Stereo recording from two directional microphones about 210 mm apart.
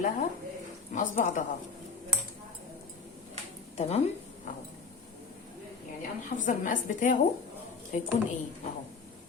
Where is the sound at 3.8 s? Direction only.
30° left (ahead or behind).